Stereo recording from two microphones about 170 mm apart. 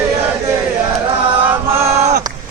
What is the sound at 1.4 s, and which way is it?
Chant, 10° right (ahead or behind).